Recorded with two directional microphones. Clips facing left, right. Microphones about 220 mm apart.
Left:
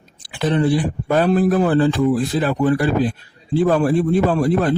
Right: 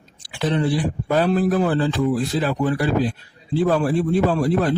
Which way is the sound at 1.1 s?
55° left (ahead or behind).